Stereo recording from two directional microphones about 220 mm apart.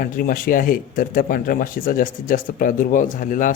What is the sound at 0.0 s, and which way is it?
Speech, 40° left (ahead or behind).